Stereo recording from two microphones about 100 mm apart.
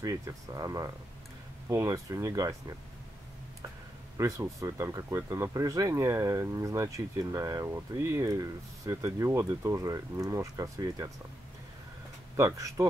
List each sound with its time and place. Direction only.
0.0 s speech: 35° right (ahead or behind)
4.2 s speech: 35° right (ahead or behind)
12.4 s speech: 30° right (ahead or behind)